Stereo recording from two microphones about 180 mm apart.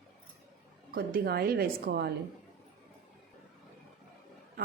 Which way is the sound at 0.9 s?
55° right (ahead or behind).